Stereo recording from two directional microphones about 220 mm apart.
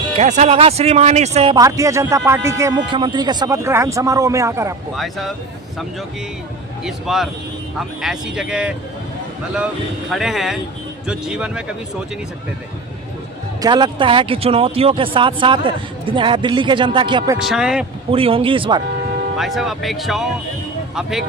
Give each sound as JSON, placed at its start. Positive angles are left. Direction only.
{"t": 0.2, "sound": "speech", "side_deg": -30}
{"t": 1.5, "sound": "speech", "side_deg": -15}
{"t": 4.9, "sound": "speech", "side_deg": 0}
{"t": 6.8, "sound": "speech", "side_deg": 0}
{"t": 10.1, "sound": "speech", "side_deg": 0}
{"t": 13.6, "sound": "speech", "side_deg": -20}
{"t": 17.3, "sound": "speech", "side_deg": -5}
{"t": 18.1, "sound": "speech", "side_deg": -25}
{"t": 19.4, "sound": "speech", "side_deg": 0}